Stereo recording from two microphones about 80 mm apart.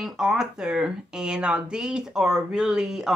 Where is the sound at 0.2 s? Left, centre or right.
Centre.